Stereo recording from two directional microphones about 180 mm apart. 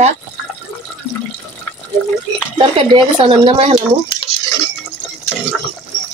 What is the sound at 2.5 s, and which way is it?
Speech, 25° right (ahead or behind).